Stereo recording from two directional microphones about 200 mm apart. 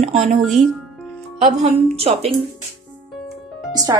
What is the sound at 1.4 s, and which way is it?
Speech, 30° right (ahead or behind).